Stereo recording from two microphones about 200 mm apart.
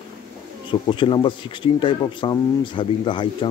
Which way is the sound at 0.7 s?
25° left (ahead or behind).